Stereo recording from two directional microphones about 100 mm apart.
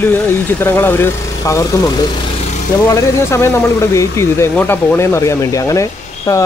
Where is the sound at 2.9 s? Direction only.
30° left (ahead or behind).